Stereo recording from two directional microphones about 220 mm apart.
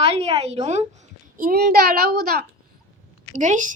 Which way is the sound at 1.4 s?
45° right (ahead or behind).